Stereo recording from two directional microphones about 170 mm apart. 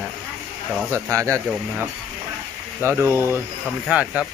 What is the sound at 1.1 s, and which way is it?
Speech, 15° right (ahead or behind).